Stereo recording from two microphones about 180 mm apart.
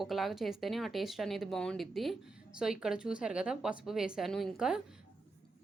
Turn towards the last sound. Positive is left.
turn(degrees=-5)  # may be behind; listen again after turning